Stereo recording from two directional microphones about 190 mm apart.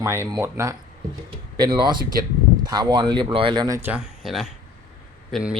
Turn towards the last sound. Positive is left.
turn(degrees=0)  # may be behind; listen again after turning